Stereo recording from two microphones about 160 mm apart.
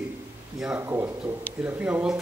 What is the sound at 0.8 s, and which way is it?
A man's voice, 15° right (ahead or behind).